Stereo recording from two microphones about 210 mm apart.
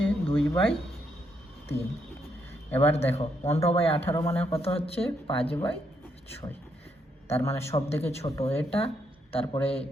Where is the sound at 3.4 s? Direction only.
15° left (ahead or behind).